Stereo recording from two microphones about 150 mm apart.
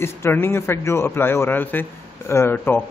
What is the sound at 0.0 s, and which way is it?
A man's voice, 15° left (ahead or behind).